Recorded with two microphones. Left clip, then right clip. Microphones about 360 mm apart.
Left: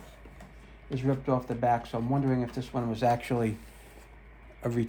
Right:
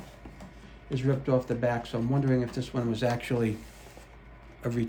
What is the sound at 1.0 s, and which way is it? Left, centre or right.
Speech, centre.